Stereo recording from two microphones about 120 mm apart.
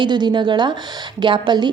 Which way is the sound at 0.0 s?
40° right (ahead or behind).